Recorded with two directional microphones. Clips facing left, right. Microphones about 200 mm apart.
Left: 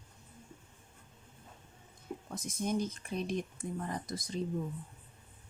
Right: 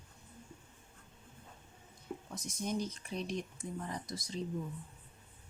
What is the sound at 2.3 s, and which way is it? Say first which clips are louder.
Speech: left 4 dB; 55° left (ahead or behind).